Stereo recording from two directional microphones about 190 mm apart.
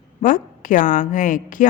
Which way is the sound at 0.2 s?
45° left (ahead or behind).